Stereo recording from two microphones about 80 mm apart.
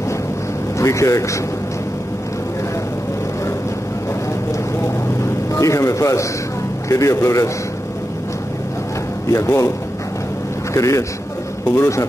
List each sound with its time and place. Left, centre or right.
0.7 s speech: left
5.2 s a sound: left
6.9 s speech: left
9.3 s speech: left
10.7 s a man's voice: left